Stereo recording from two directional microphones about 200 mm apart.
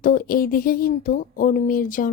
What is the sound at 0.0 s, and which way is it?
Speech, 45° left (ahead or behind).